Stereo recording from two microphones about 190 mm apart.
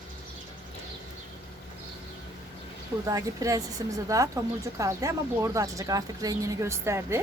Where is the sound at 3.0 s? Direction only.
15° right (ahead or behind).